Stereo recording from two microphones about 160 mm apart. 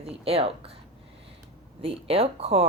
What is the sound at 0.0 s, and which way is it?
Speech, 40° right (ahead or behind).